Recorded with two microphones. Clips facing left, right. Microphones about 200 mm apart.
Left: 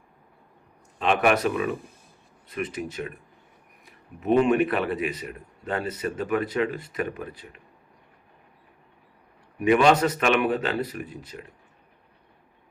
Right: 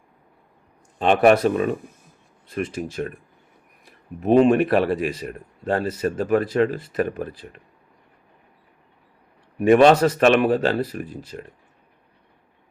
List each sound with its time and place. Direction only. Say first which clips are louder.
0.9 s a man's voice: right 6 dB; 35° right (ahead or behind)
9.6 s a man's voice: right 5 dB; 35° right (ahead or behind)